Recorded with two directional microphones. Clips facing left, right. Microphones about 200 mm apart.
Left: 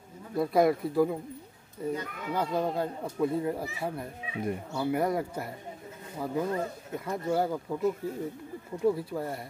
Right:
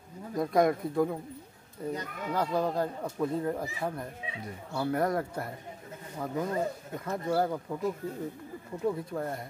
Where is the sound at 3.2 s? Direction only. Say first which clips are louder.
Left 2 dB; 5° left (ahead or behind).